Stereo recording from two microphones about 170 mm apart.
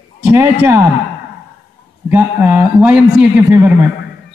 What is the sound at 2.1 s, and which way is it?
A man's voice, 10° right (ahead or behind).